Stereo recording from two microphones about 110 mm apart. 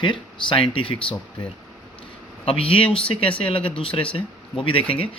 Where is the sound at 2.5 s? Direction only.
55° left (ahead or behind).